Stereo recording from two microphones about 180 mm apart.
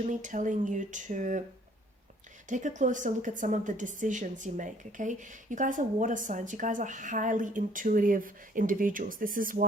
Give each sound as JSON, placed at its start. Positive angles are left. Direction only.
{"t": 0.1, "sound": "a woman's voice", "side_deg": -45}
{"t": 2.5, "sound": "a woman's voice", "side_deg": -45}